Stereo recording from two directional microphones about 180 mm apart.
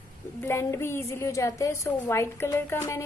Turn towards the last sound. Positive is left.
turn(degrees=15)  # may be behind; listen again after turning